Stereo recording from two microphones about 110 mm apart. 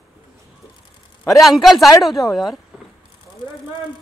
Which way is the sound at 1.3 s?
Centre (ahead or behind).